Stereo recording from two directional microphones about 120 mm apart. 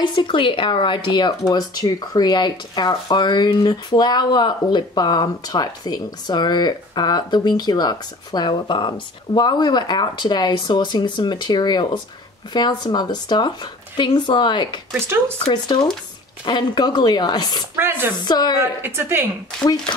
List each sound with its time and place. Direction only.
0.0 s speech: 40° left (ahead or behind)
15.0 s speech: 20° right (ahead or behind)
15.4 s speech: 40° left (ahead or behind)
17.7 s speech: 20° right (ahead or behind)
18.1 s speech: 35° left (ahead or behind)
18.8 s speech: 20° right (ahead or behind)